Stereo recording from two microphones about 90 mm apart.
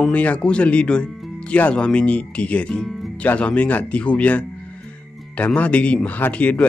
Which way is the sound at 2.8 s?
Centre (ahead or behind).